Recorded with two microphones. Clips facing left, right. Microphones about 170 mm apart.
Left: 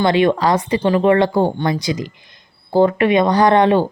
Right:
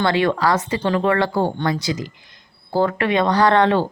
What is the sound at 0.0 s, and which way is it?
Speech, 20° left (ahead or behind).